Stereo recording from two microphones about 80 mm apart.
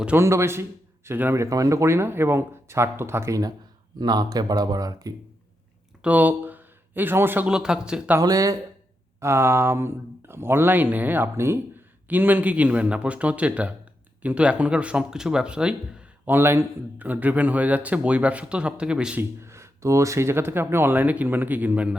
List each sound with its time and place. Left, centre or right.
0.2 s speech: right
1.5 s speech: right
4.0 s speech: right
6.0 s a sound: centre
7.4 s speech: centre
8.2 s speech: right
9.2 s speech: right; by 16.3 s centre
16.3 s a man's voice: right; by 19.2 s centre
19.4 s a man's voice: right; by 21.9 s centre